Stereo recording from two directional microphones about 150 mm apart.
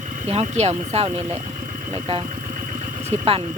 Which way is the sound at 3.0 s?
45° right (ahead or behind).